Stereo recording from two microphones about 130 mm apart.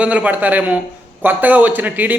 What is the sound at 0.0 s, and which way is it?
Speech, 10° right (ahead or behind).